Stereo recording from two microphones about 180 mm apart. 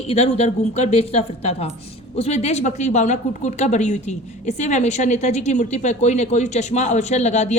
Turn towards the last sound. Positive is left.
turn(degrees=40)  # may be behind; listen again after turning